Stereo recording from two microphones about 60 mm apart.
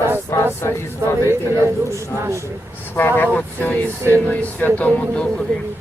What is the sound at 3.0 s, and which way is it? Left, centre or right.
Speech, left.